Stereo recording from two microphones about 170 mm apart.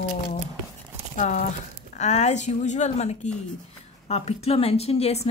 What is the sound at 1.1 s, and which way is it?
A woman's voice, 50° left (ahead or behind).